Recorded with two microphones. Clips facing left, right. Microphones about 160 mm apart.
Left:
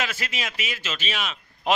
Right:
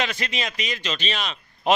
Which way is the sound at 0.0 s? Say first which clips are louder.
Right 3 dB; 5° left (ahead or behind).